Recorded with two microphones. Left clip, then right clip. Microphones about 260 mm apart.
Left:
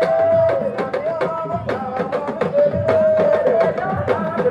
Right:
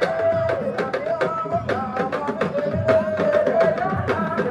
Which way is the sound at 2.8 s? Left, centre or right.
Left.